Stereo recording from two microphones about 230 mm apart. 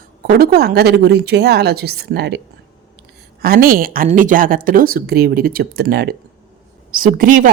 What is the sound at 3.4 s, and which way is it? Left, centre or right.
Speech, right.